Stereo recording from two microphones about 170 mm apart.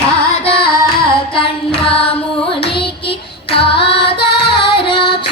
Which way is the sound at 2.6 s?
30° left (ahead or behind).